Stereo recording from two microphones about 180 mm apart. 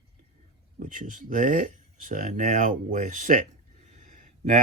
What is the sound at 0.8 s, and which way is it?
Speech, 45° right (ahead or behind).